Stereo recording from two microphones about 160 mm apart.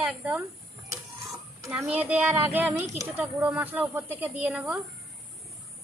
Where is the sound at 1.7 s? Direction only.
10° right (ahead or behind).